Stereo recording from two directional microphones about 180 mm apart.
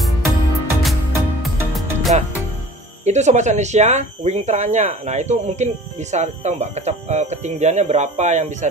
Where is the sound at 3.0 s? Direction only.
40° right (ahead or behind).